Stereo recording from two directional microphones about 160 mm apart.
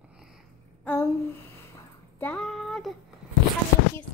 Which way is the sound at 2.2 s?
5° left (ahead or behind).